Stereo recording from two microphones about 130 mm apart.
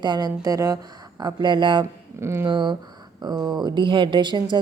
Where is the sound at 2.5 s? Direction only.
35° right (ahead or behind).